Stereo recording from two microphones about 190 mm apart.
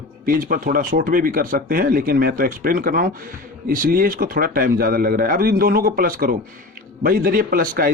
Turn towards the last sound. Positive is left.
turn(degrees=-45)  # may be behind; listen again after turning